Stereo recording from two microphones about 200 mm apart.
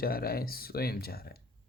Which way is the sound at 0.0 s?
50° left (ahead or behind).